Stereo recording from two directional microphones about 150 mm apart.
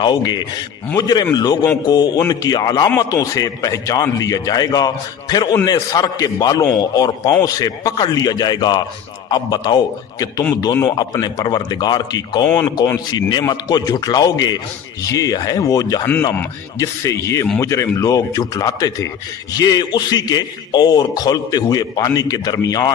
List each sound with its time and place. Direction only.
0.0 s a man's voice: 30° left (ahead or behind)
12.5 s speech: 15° left (ahead or behind)
13.1 s a man's voice: 30° left (ahead or behind)